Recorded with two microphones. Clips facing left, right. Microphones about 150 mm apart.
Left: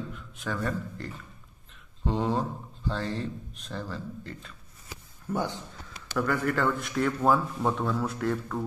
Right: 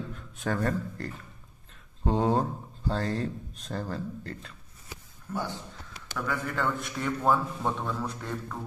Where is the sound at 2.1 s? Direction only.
30° right (ahead or behind).